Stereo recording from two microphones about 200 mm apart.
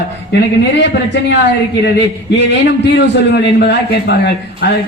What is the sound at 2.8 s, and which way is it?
Speech, 60° left (ahead or behind).